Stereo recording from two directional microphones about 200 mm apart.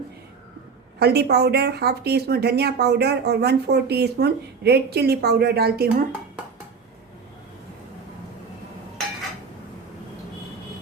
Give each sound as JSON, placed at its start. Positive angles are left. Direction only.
{"t": 0.9, "sound": "speech", "side_deg": -55}